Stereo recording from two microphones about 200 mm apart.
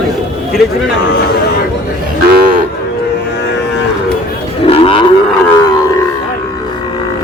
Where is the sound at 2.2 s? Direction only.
50° right (ahead or behind).